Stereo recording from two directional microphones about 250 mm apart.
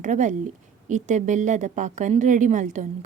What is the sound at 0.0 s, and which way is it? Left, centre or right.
A woman's voice, right.